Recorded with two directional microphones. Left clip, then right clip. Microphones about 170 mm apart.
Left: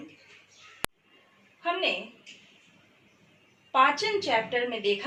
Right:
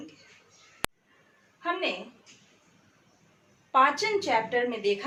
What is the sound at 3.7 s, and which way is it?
A woman's voice, 20° right (ahead or behind).